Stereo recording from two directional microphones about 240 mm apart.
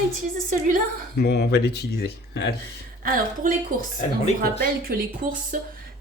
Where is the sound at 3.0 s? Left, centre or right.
Right.